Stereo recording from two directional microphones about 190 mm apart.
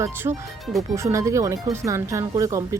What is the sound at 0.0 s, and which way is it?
A woman's voice, 15° right (ahead or behind).